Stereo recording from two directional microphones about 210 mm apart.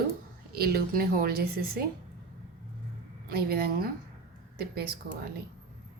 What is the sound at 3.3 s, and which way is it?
A woman's voice, 45° right (ahead or behind).